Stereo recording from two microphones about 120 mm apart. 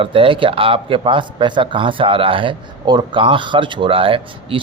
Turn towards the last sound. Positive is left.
turn(degrees=-45)  # may be behind; listen again after turning